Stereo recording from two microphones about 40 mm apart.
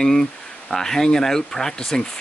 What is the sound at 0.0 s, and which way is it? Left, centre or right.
Speech, centre.